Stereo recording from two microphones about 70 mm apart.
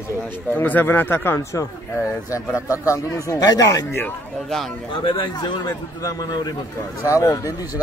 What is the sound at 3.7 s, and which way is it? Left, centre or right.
Speech, left.